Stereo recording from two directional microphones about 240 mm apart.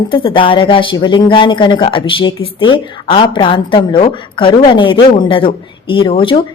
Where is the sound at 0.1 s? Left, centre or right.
Left.